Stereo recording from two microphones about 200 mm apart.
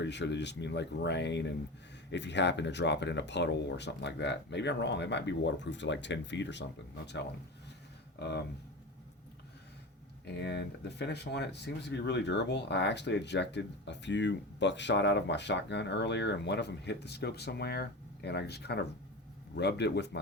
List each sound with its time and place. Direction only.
0.0 s speech: 60° left (ahead or behind)
8.2 s speech: 55° left (ahead or behind)
10.4 s speech: 60° left (ahead or behind)